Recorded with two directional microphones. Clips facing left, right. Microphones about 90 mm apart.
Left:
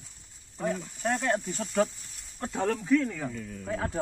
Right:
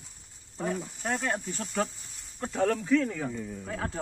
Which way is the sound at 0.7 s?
10° right (ahead or behind).